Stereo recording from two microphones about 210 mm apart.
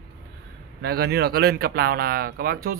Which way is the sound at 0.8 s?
50° right (ahead or behind).